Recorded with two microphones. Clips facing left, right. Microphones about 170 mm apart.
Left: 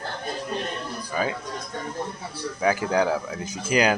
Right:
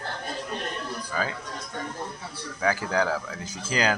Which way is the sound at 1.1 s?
15° left (ahead or behind).